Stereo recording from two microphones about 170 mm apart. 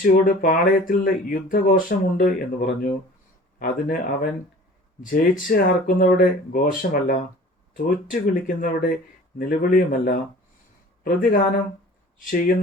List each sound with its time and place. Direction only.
0.0 s speech: 55° left (ahead or behind)
5.5 s speech: 55° left (ahead or behind)